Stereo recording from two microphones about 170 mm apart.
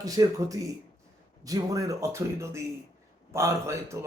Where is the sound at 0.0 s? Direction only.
20° right (ahead or behind).